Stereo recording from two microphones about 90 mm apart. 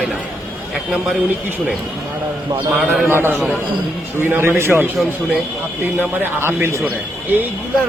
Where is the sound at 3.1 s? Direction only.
25° right (ahead or behind).